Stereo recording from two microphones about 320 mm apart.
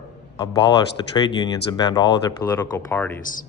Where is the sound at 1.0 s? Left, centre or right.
Centre.